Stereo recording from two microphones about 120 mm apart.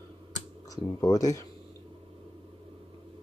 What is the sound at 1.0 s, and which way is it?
Speech, 30° left (ahead or behind).